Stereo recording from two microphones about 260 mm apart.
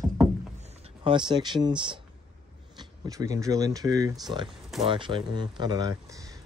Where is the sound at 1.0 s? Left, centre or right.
Centre.